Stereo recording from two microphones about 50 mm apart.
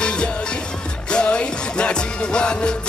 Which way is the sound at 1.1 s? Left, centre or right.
Left.